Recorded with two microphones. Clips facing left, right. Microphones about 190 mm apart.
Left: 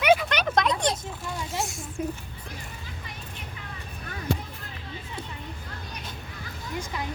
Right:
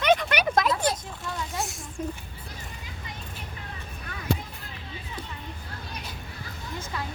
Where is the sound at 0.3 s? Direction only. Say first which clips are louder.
Right 1 dB; 10° right (ahead or behind).